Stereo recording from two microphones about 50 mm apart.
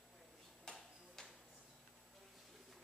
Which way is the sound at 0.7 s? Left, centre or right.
Centre.